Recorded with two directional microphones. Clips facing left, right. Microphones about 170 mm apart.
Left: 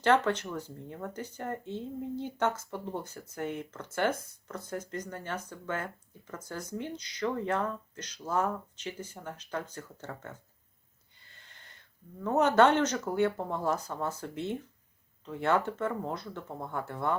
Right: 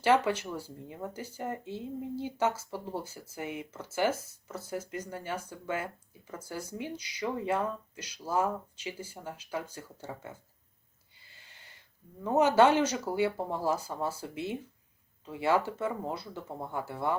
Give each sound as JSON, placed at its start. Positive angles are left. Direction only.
{"t": 0.0, "sound": "speech", "side_deg": -10}
{"t": 11.3, "sound": "a sound", "side_deg": -10}
{"t": 12.2, "sound": "speech", "side_deg": -10}